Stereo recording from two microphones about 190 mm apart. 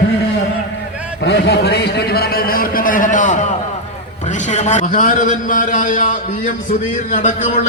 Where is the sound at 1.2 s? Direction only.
65° left (ahead or behind).